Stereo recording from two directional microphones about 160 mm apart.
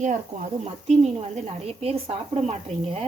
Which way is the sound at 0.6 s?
40° right (ahead or behind).